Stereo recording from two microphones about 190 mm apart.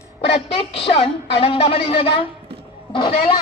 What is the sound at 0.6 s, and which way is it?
A woman's voice, 30° left (ahead or behind).